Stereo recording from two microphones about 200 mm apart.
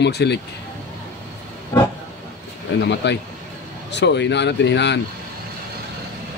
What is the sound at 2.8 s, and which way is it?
Speech, 60° left (ahead or behind).